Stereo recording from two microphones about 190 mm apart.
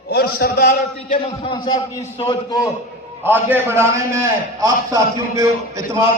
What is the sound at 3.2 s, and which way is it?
A man's voice, 10° right (ahead or behind).